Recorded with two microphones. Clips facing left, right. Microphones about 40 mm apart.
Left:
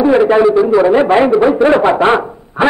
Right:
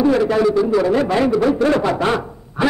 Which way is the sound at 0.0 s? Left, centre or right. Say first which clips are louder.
Left 6 dB; left.